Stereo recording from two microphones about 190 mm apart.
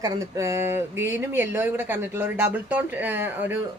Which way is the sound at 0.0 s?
15° right (ahead or behind).